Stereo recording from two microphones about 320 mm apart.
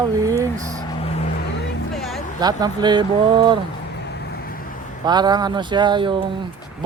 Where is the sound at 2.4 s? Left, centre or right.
Centre.